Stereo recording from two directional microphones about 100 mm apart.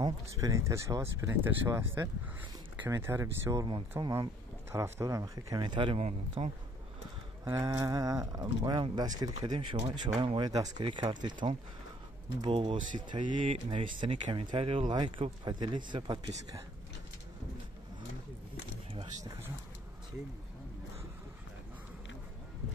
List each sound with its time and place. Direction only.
0.0 s speech: 35° right (ahead or behind)
5.7 s speech: 60° right (ahead or behind); by 6.5 s 75° right (ahead or behind)
7.4 s speech: 30° right (ahead or behind)
9.7 s speech: 60° right (ahead or behind)
12.4 s speech: 60° right (ahead or behind)